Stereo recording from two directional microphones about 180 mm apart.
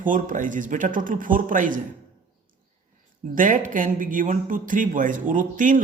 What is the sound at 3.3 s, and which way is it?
Speech, 45° right (ahead or behind).